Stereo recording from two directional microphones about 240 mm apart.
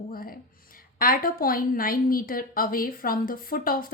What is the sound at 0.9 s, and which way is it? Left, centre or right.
A woman's voice, left.